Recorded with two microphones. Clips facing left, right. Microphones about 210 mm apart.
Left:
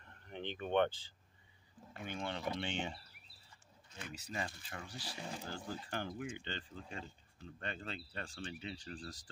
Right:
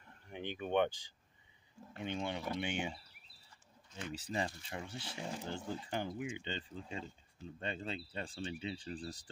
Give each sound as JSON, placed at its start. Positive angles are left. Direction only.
{"t": 0.3, "sound": "speech", "side_deg": -10}
{"t": 4.1, "sound": "speech", "side_deg": -30}